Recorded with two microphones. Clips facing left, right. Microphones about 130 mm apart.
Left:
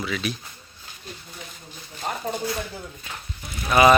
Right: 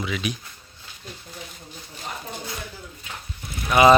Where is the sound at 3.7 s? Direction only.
20° right (ahead or behind).